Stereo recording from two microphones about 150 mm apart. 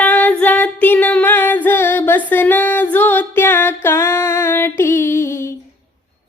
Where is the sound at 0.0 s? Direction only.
10° left (ahead or behind).